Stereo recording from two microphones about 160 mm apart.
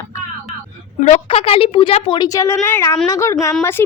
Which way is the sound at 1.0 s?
45° left (ahead or behind).